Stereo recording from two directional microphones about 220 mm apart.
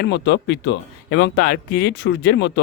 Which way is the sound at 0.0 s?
50° left (ahead or behind).